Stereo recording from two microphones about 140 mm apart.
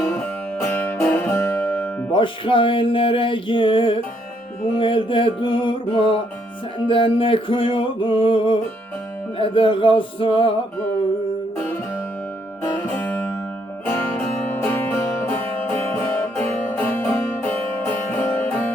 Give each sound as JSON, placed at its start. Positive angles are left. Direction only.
{"t": 0.1, "sound": "music", "side_deg": 15}
{"t": 2.1, "sound": "music", "side_deg": 40}
{"t": 12.7, "sound": "music", "side_deg": 15}